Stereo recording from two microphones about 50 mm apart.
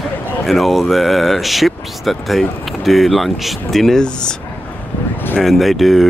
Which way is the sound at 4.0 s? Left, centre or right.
Centre.